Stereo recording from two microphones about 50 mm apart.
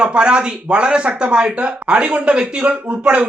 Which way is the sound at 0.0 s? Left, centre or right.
Centre.